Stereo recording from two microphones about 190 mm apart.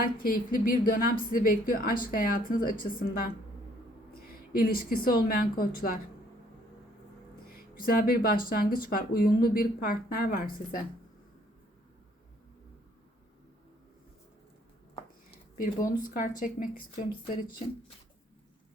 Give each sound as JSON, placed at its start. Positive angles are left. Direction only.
{"t": 0.0, "sound": "a woman's voice", "side_deg": 50}
{"t": 4.5, "sound": "a woman's voice", "side_deg": 50}
{"t": 7.8, "sound": "a woman's voice", "side_deg": 50}
{"t": 15.5, "sound": "a woman's voice", "side_deg": 45}